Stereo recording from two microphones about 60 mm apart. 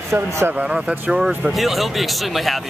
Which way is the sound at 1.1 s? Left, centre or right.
Centre.